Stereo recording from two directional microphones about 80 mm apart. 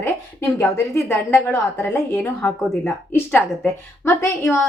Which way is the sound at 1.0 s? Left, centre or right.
Left.